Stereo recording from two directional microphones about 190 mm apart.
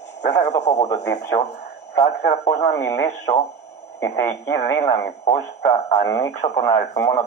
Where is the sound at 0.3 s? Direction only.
20° left (ahead or behind).